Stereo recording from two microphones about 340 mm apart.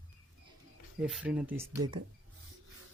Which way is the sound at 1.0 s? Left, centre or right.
Centre.